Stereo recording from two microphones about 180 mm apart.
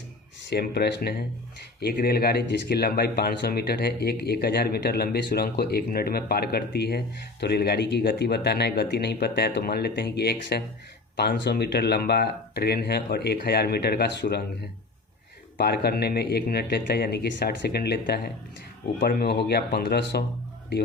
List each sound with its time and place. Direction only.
0.5 s speech: 65° left (ahead or behind)
15.5 s speech: 60° left (ahead or behind)